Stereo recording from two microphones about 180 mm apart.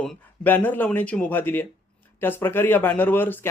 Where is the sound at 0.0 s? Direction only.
10° left (ahead or behind).